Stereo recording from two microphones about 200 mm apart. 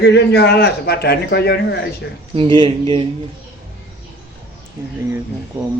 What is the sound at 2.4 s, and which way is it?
Speech, 25° right (ahead or behind).